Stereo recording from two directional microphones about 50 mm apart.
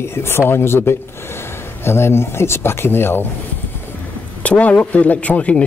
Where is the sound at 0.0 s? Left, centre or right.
Left.